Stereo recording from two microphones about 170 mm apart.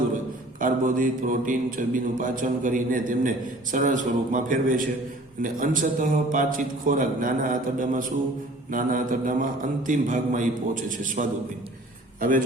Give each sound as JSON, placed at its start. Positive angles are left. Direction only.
{"t": 0.6, "sound": "a man's voice", "side_deg": -50}